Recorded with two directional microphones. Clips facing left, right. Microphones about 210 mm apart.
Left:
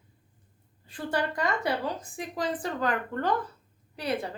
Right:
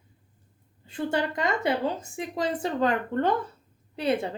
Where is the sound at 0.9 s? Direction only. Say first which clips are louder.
Right 3 dB; 25° right (ahead or behind).